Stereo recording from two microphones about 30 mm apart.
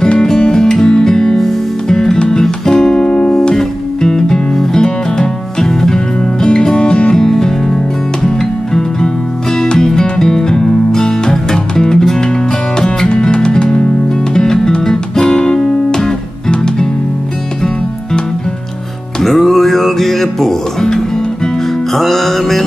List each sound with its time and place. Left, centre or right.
0.5 s music: left
3.1 s music: left
3.5 s music: centre
7.2 s music: centre
13.2 s music: left
14.3 s guitar: left
19.2 s music: centre
21.9 s music: centre